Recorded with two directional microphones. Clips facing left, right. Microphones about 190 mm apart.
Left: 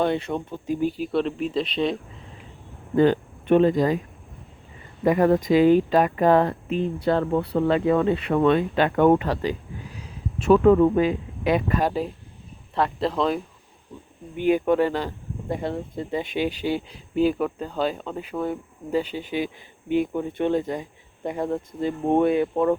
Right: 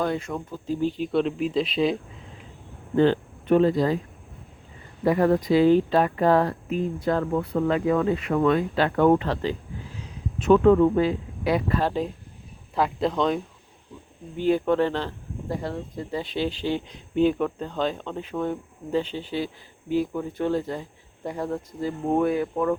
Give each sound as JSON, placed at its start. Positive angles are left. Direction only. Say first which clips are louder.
{"t": 0.0, "sound": "speech", "louder": "left 3 dB", "side_deg": 25}
{"t": 0.7, "sound": "speech", "louder": "left 1 dB", "side_deg": 10}
{"t": 2.9, "sound": "speech", "louder": "left 1 dB", "side_deg": 10}
{"t": 5.0, "sound": "speech", "louder": "left 2 dB", "side_deg": 20}
{"t": 12.7, "sound": "speech", "louder": "even", "side_deg": 0}
{"t": 14.3, "sound": "speech", "louder": "left 1 dB", "side_deg": 15}
{"t": 15.4, "sound": "speech", "louder": "left 2 dB", "side_deg": 20}